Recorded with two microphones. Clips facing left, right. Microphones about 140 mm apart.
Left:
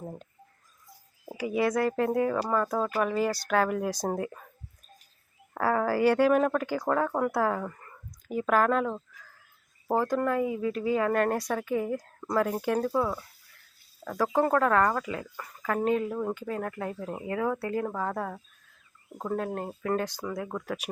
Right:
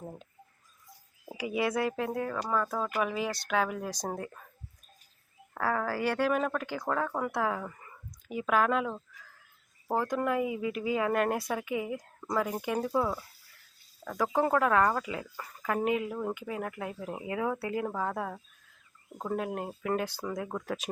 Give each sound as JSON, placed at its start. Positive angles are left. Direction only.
{"t": 1.9, "sound": "speech", "side_deg": 0}
{"t": 4.0, "sound": "speech", "side_deg": 10}
{"t": 5.5, "sound": "speech", "side_deg": 10}
{"t": 10.1, "sound": "speech", "side_deg": -15}
{"t": 14.0, "sound": "a sound", "side_deg": 5}
{"t": 14.4, "sound": "speech", "side_deg": -10}